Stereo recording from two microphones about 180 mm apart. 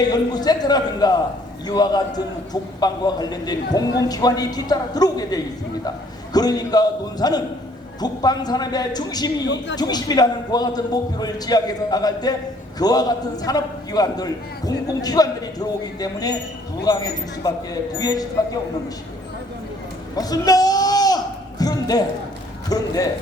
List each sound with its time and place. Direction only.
0.1 s a man's voice: 20° left (ahead or behind)
20.1 s speech: 20° left (ahead or behind)
21.6 s a sound: 20° left (ahead or behind)
22.7 s a man's voice: 20° left (ahead or behind)